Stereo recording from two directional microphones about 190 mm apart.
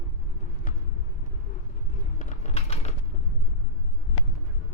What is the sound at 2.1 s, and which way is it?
Typing, 40° left (ahead or behind).